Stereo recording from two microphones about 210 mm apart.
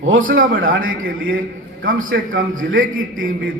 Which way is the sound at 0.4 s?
40° right (ahead or behind).